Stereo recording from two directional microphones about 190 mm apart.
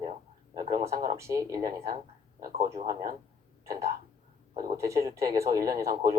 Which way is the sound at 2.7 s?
35° right (ahead or behind).